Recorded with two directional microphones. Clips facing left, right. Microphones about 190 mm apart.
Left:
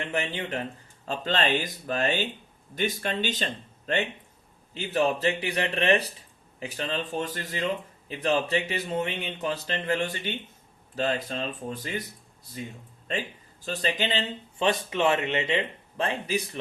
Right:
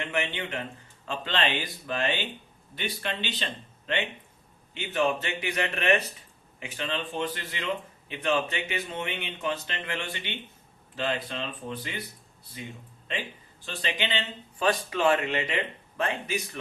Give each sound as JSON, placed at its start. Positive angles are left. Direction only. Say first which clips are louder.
{"t": 0.0, "sound": "a man's voice", "louder": "left 1 dB", "side_deg": 35}
{"t": 13.1, "sound": "speech", "louder": "left 3 dB", "side_deg": 45}
{"t": 14.6, "sound": "speech", "louder": "even", "side_deg": 25}